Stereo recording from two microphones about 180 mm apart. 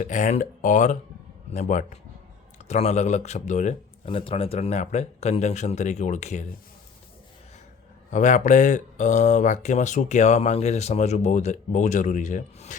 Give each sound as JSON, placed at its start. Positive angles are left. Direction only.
{"t": 0.0, "sound": "speech", "side_deg": 45}
{"t": 8.1, "sound": "speech", "side_deg": 45}